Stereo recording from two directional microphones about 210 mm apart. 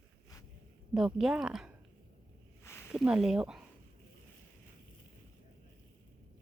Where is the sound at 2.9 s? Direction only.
5° right (ahead or behind).